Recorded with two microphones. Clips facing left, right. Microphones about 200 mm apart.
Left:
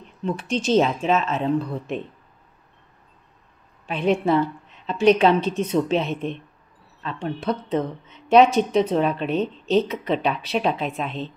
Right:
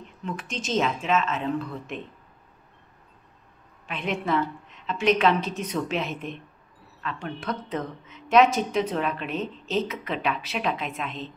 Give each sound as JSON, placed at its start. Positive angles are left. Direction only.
{"t": 0.2, "sound": "a woman's voice", "side_deg": 30}
{"t": 3.8, "sound": "a woman's voice", "side_deg": 35}